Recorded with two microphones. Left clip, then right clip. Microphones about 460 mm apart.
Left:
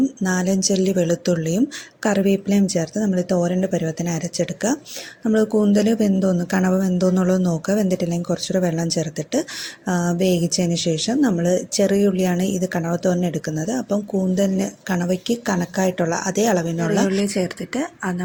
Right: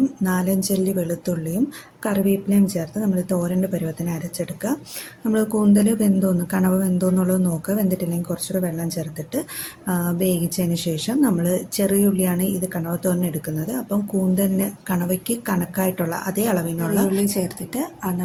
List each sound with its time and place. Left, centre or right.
0.0 s speech: right